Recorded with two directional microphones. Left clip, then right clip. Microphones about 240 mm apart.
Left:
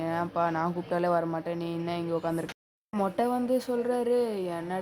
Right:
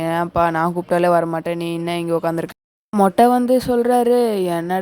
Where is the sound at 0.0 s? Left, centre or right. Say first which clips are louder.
Right 11 dB; right.